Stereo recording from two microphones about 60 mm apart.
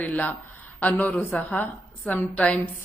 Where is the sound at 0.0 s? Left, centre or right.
Left.